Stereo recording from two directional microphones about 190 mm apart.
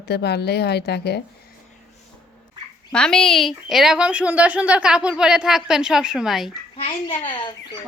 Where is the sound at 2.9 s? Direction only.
5° left (ahead or behind).